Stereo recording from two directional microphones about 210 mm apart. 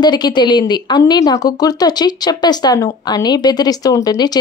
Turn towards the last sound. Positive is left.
turn(degrees=20)  # may be behind; listen again after turning